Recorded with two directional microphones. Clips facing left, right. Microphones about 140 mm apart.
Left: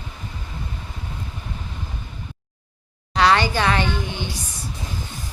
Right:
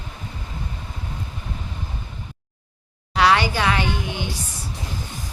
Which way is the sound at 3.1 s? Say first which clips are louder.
Even; 10° right (ahead or behind).